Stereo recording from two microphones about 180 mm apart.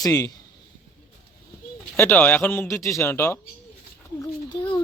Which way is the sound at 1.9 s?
10° left (ahead or behind).